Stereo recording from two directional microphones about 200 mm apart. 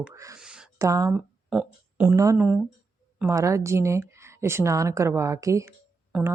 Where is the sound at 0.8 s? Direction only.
15° right (ahead or behind).